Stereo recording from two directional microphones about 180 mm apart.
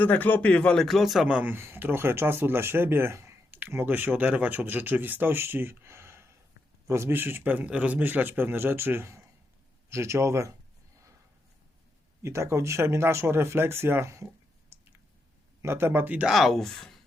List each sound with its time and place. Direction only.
0.0 s a man's voice: 10° left (ahead or behind); by 10.5 s 15° right (ahead or behind)
12.2 s a man's voice: 15° right (ahead or behind)
15.6 s speech: 15° right (ahead or behind); by 17.0 s 5° left (ahead or behind)